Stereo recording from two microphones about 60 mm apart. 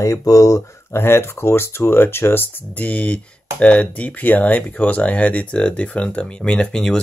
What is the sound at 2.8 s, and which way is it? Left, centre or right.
Speech, left.